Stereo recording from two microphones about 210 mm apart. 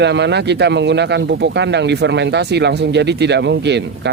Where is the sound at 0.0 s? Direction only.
55° right (ahead or behind).